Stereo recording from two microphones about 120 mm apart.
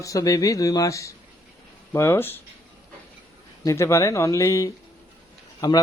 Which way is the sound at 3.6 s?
25° left (ahead or behind).